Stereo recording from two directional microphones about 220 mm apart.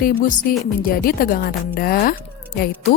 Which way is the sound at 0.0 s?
40° left (ahead or behind).